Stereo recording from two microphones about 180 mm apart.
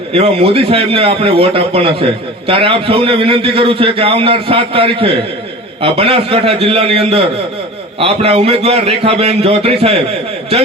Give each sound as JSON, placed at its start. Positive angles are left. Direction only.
{"t": 0.1, "sound": "a man's voice", "side_deg": -35}